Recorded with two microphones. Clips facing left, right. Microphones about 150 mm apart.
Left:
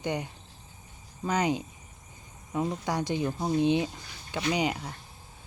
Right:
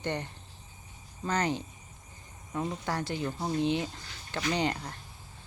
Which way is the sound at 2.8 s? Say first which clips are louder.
Left 4 dB; 15° left (ahead or behind).